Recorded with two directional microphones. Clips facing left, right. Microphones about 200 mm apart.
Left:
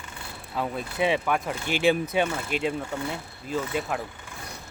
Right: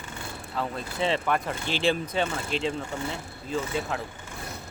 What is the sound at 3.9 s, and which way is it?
Speech, 10° left (ahead or behind).